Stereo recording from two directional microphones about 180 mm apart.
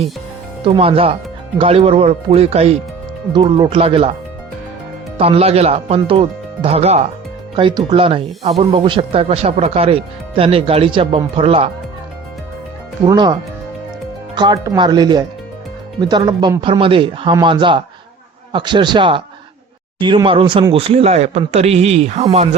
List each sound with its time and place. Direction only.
0.6 s speech: 30° right (ahead or behind)
5.1 s speech: 30° right (ahead or behind)
13.1 s speech: 25° right (ahead or behind)